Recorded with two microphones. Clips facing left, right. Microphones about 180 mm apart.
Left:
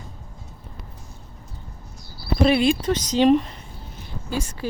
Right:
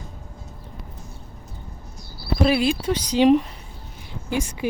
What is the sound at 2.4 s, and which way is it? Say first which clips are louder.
Speech: left 2 dB; 5° right (ahead or behind).